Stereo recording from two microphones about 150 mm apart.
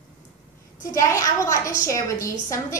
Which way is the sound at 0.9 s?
20° left (ahead or behind).